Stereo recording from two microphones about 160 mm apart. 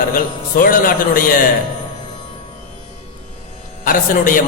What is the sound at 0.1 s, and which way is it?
A man's voice, 60° left (ahead or behind).